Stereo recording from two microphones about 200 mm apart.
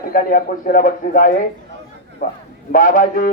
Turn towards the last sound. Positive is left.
turn(degrees=45)  # may be behind; listen again after turning